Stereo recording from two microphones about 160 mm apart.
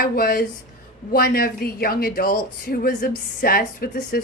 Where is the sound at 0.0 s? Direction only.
70° left (ahead or behind).